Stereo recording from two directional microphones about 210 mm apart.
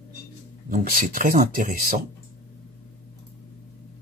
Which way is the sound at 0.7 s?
40° right (ahead or behind).